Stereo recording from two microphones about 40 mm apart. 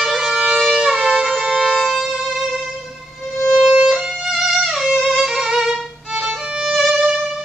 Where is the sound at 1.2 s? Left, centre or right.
Centre.